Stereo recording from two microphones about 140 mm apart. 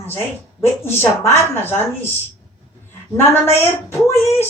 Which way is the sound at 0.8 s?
15° left (ahead or behind).